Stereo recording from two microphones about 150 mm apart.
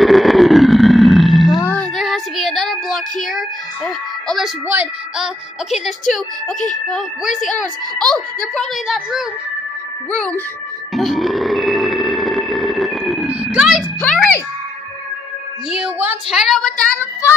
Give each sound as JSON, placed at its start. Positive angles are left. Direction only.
{"t": 0.0, "sound": "roar", "side_deg": 0}
{"t": 1.6, "sound": "music", "side_deg": 10}
{"t": 2.0, "sound": "child singing", "side_deg": 0}
{"t": 4.6, "sound": "a child's voice", "side_deg": -10}
{"t": 5.9, "sound": "speech", "side_deg": 55}
{"t": 8.5, "sound": "a child's voice", "side_deg": 0}
{"t": 11.0, "sound": "grunt", "side_deg": 0}
{"t": 14.0, "sound": "music", "side_deg": 10}
{"t": 15.7, "sound": "a woman's voice", "side_deg": -10}
{"t": 16.3, "sound": "a child's voice", "side_deg": 0}